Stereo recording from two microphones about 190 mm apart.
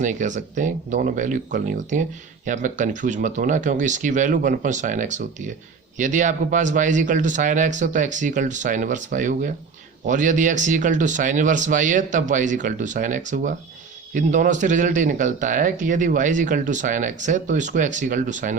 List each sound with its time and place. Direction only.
0.0 s speech: 40° right (ahead or behind)